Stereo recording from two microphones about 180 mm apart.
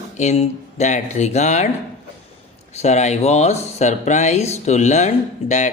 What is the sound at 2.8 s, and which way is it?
A man's voice, 40° left (ahead or behind).